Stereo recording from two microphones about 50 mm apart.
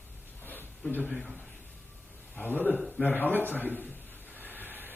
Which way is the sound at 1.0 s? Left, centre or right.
Centre.